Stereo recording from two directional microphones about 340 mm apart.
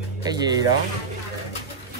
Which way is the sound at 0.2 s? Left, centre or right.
Centre.